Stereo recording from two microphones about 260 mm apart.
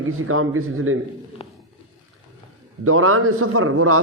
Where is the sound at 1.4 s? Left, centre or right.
Left.